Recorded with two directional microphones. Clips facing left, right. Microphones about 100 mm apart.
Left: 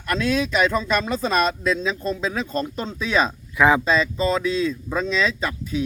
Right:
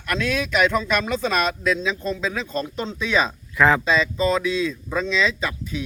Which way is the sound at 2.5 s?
40° left (ahead or behind).